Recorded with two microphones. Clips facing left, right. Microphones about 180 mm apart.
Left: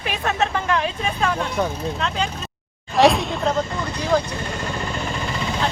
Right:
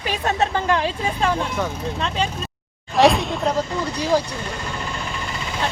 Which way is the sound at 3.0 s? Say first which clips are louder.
Even; centre (ahead or behind).